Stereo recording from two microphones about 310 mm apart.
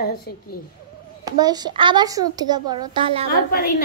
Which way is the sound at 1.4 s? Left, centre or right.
Centre.